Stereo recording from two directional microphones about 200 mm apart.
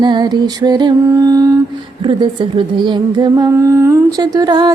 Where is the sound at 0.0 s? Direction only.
20° right (ahead or behind).